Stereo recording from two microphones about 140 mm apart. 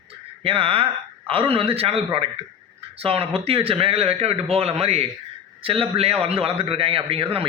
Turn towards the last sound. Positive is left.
turn(degrees=-40)  # may be behind; listen again after turning